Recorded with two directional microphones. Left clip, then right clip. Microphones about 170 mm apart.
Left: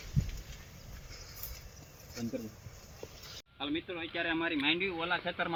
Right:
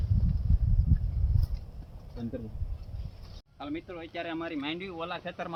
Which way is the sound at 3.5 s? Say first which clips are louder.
Left 1 dB; 30° right (ahead or behind).